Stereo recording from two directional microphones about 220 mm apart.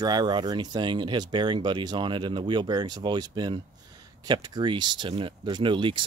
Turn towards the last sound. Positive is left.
turn(degrees=-20)  # may be behind; listen again after turning